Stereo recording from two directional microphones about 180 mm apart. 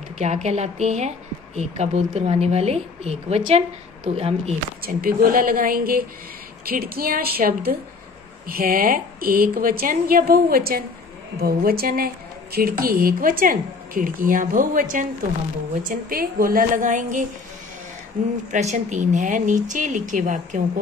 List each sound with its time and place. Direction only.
0.2 s a woman's voice: 40° right (ahead or behind)
4.8 s a woman's voice: 55° right (ahead or behind)
18.5 s a woman's voice: 40° right (ahead or behind)